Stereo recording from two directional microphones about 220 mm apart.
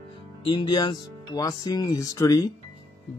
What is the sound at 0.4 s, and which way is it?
Speech, 20° left (ahead or behind).